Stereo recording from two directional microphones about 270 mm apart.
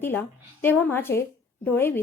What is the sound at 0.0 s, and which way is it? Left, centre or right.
Speech, centre.